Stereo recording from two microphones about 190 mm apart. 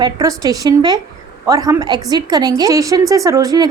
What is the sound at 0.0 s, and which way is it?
Speech, 20° right (ahead or behind).